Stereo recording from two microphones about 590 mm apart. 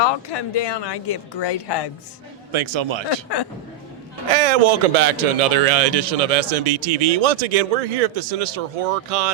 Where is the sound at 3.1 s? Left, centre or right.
Left.